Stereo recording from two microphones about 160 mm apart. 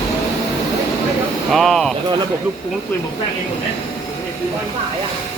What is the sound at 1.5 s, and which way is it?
Speech, centre (ahead or behind).